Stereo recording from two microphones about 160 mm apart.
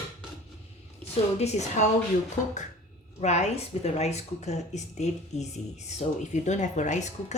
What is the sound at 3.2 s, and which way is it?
Speech, 45° left (ahead or behind).